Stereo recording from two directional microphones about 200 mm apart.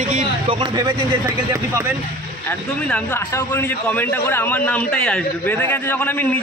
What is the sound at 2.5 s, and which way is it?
A man's voice, 10° left (ahead or behind).